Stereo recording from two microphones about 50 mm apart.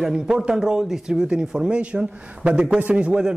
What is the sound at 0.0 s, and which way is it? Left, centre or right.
A man's voice, centre.